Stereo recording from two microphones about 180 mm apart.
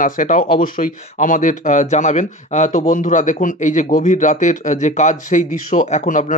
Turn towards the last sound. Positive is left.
turn(degrees=45)  # may be behind; listen again after turning